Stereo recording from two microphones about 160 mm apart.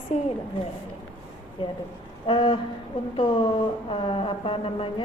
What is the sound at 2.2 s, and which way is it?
Speech, 30° left (ahead or behind).